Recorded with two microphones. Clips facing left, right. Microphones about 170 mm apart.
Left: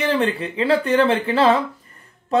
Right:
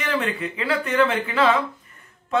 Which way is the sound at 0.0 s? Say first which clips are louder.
Left 5 dB; 30° left (ahead or behind).